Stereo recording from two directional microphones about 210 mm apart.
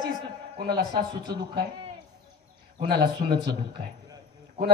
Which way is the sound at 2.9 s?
50° right (ahead or behind).